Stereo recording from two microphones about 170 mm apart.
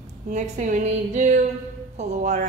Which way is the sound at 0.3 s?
45° right (ahead or behind).